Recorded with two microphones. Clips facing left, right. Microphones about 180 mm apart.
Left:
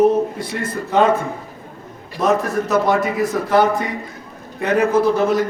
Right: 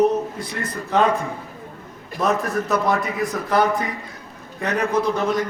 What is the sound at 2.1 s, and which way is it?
A man's voice, centre (ahead or behind).